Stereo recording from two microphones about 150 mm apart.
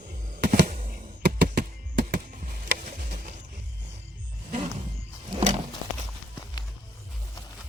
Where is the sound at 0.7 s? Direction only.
65° right (ahead or behind); by 2.7 s 85° right.